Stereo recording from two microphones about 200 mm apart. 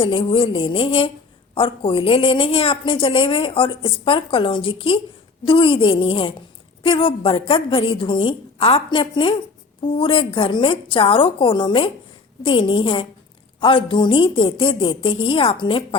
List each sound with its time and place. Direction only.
0.0 s a woman's voice: 25° left (ahead or behind)